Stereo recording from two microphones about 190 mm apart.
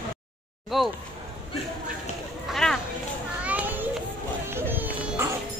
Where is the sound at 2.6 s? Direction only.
5° left (ahead or behind).